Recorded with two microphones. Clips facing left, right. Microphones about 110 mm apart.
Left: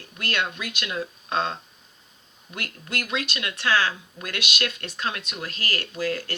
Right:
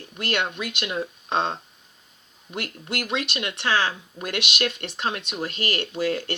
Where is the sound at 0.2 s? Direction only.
25° right (ahead or behind).